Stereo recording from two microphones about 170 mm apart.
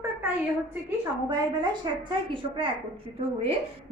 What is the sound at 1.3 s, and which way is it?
A woman's voice, 25° right (ahead or behind).